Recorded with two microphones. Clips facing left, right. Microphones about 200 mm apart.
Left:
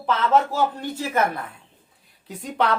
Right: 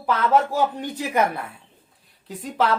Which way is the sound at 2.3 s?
Centre (ahead or behind).